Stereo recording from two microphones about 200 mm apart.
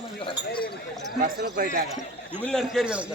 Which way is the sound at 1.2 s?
45° right (ahead or behind).